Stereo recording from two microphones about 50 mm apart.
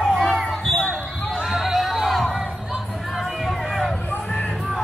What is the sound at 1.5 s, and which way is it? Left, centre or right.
Crowd, centre.